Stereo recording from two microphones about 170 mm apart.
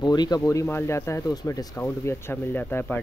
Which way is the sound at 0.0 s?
25° left (ahead or behind).